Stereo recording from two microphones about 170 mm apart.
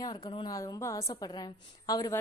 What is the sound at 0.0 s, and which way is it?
A woman's voice, 25° left (ahead or behind).